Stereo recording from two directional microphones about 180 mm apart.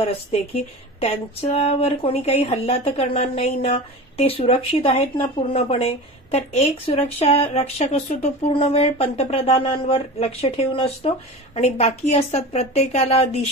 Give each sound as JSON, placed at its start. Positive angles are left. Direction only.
{"t": 1.0, "sound": "speech", "side_deg": 35}